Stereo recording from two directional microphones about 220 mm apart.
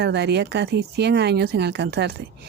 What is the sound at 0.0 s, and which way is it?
Speech, 50° right (ahead or behind).